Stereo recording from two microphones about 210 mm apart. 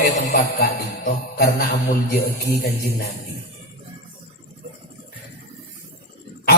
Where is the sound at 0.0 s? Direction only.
50° left (ahead or behind).